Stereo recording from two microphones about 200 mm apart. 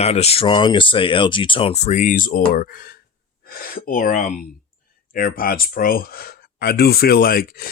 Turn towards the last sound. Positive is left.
turn(degrees=45)  # may be behind; listen again after turning